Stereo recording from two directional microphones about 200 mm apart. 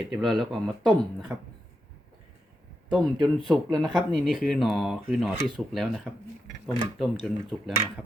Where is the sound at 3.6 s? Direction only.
Centre (ahead or behind).